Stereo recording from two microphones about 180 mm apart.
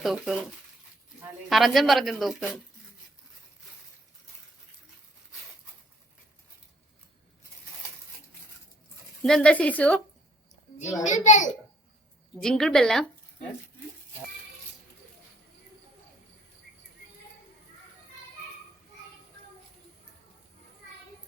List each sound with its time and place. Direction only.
0.0 s speech: centre (ahead or behind)
1.5 s speech: centre (ahead or behind)
9.2 s a woman's voice: 5° left (ahead or behind)
11.0 s a child's voice: 40° left (ahead or behind)
12.4 s speech: 5° left (ahead or behind)